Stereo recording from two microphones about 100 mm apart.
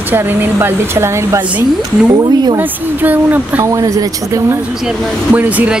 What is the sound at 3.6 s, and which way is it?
Speech, 35° right (ahead or behind).